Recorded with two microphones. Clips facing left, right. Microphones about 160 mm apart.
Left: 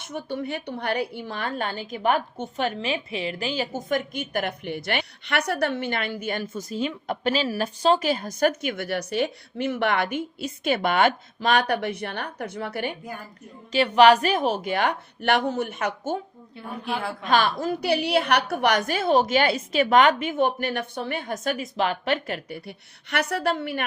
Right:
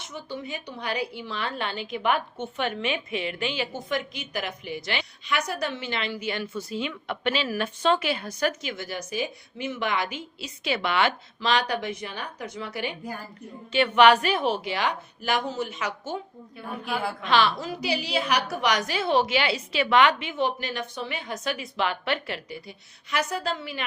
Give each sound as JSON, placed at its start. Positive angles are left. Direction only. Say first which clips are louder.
{"t": 0.0, "sound": "a woman's voice", "louder": "left 5 dB", "side_deg": 55}
{"t": 13.7, "sound": "a woman's voice", "louder": "left 2 dB", "side_deg": 35}
{"t": 16.8, "sound": "speech", "louder": "even", "side_deg": 0}
{"t": 17.2, "sound": "a woman's voice", "louder": "left 2 dB", "side_deg": 50}